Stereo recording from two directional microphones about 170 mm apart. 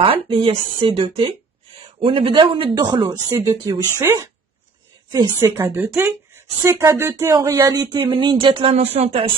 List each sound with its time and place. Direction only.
0.0 s speech: 30° right (ahead or behind)
3.1 s speech: 15° right (ahead or behind); by 9.2 s 35° right (ahead or behind)